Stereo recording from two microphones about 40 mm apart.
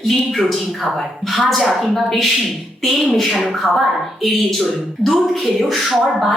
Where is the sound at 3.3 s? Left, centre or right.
Centre.